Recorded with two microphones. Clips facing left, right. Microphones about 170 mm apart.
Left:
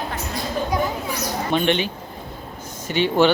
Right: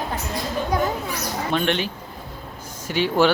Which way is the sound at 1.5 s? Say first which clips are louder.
Left 2 dB; centre (ahead or behind).